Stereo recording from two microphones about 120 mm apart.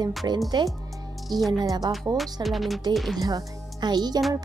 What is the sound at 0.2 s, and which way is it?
Speech, 30° right (ahead or behind).